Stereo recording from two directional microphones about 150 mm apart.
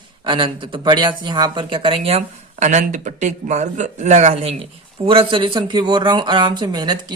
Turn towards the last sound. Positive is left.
turn(degrees=-30)  # may be behind; listen again after turning